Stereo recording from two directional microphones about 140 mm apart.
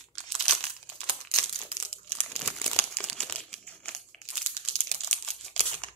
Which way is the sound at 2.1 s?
5° left (ahead or behind).